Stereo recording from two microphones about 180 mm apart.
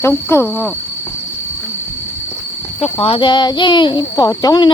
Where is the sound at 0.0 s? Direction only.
15° left (ahead or behind).